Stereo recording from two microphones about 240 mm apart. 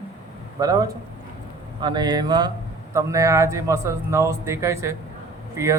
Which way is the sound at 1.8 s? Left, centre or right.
Centre.